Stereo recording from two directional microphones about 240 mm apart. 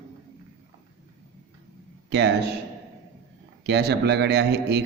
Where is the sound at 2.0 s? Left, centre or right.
Right.